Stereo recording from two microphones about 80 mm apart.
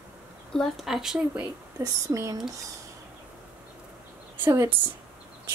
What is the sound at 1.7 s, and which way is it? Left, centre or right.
Speech, right.